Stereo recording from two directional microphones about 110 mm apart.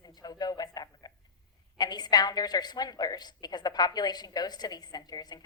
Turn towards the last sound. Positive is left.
turn(degrees=40)  # may be behind; listen again after turning